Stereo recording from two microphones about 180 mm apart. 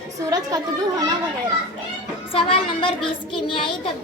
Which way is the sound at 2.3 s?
30° left (ahead or behind).